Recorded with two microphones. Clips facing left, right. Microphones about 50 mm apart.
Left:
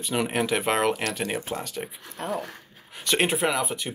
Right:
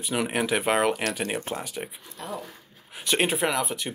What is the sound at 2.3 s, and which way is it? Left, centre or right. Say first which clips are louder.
Zipper: left 5 dB; left.